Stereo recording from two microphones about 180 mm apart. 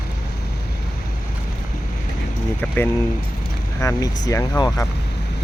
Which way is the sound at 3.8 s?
20° left (ahead or behind).